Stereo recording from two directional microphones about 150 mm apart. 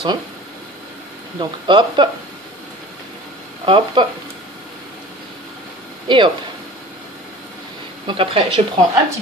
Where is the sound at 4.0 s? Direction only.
30° right (ahead or behind).